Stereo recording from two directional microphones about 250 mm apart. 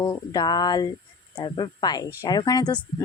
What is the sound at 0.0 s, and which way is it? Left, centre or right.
Speech, centre.